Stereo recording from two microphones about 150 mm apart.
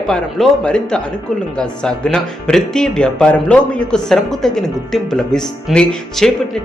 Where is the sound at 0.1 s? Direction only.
5° left (ahead or behind).